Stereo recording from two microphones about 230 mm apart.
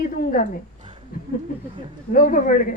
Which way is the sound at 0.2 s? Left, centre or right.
Left.